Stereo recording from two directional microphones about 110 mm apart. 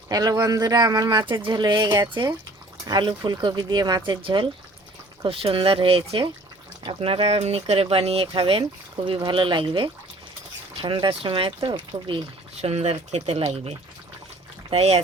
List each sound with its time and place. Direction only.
0.1 s speech: 35° right (ahead or behind)
4.2 s speech: 50° right (ahead or behind)
12.6 s speech: 70° right (ahead or behind)